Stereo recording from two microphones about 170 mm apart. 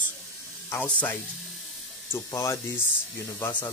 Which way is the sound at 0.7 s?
10° left (ahead or behind).